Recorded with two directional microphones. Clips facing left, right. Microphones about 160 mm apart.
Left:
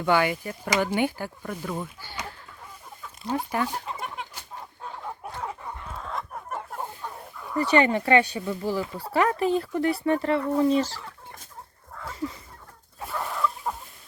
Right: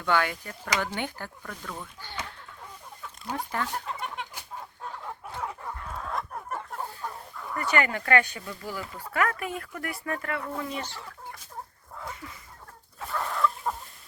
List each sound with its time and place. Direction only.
0.0 s speech: 10° left (ahead or behind)
3.3 s speech: 10° left (ahead or behind)
6.0 s chicken: centre (ahead or behind)
7.5 s speech: 25° left (ahead or behind)
13.0 s chicken: 10° left (ahead or behind)